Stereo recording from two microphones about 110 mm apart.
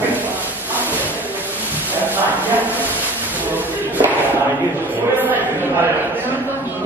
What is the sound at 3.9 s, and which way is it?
Thump, 15° right (ahead or behind).